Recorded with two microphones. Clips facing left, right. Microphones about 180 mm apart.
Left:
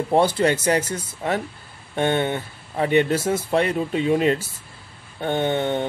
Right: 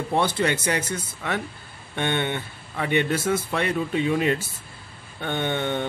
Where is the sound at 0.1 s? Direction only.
40° left (ahead or behind).